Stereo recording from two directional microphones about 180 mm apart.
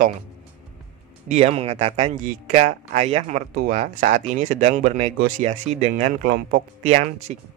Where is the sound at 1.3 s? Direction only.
35° right (ahead or behind); by 6.9 s 50° right (ahead or behind).